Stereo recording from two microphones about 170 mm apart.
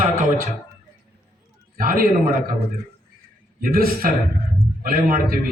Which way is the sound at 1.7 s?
55° right (ahead or behind).